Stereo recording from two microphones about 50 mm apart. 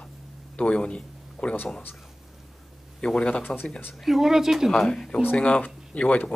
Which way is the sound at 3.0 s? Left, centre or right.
Left.